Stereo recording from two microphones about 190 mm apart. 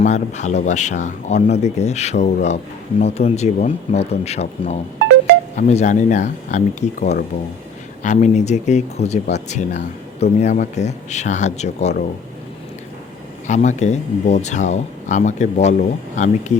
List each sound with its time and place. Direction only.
0.0 s speech: 40° left (ahead or behind)
13.5 s speech: 40° left (ahead or behind)